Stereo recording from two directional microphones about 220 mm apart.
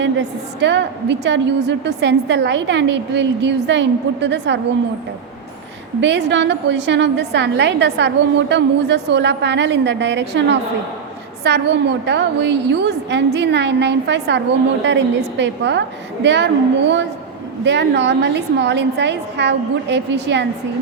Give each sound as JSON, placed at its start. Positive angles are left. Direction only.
{"t": 0.0, "sound": "a woman's voice", "side_deg": -50}
{"t": 6.0, "sound": "a woman's voice", "side_deg": -50}
{"t": 17.6, "sound": "a woman's voice", "side_deg": -50}